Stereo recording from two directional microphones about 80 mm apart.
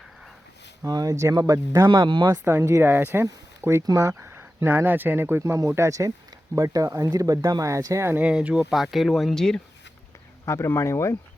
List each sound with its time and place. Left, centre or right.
0.9 s speech: right
2.0 s speech: right
2.3 s speech: right
4.3 s speech: right
5.4 s speech: right
8.2 s speech: centre
8.8 s speech: centre
10.4 s speech: left